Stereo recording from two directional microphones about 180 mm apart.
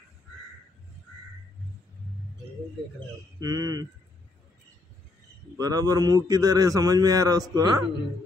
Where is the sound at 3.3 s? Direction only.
20° right (ahead or behind).